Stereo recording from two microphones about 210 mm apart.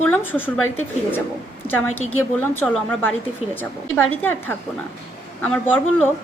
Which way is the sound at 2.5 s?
5° left (ahead or behind).